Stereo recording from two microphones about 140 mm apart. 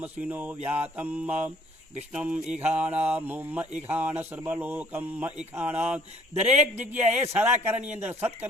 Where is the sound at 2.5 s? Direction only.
10° right (ahead or behind).